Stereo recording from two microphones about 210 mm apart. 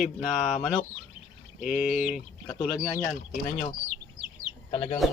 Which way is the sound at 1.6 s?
5° right (ahead or behind).